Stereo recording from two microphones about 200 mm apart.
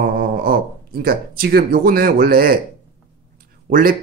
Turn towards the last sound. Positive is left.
turn(degrees=-45)  # may be behind; listen again after turning